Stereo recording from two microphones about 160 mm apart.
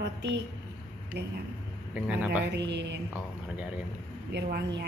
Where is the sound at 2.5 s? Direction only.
90° right.